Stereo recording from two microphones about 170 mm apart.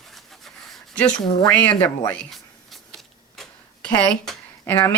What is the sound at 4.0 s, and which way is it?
Speech, 10° left (ahead or behind).